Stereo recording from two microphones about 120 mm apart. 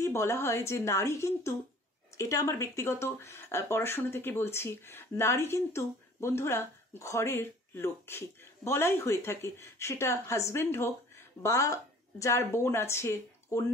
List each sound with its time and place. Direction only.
0.0 s a woman's voice: 20° left (ahead or behind)